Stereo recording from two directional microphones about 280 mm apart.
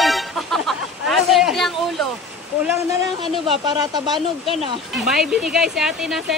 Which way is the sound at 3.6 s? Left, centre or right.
Centre.